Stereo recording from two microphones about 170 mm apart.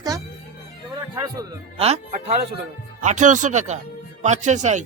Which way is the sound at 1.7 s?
35° right (ahead or behind).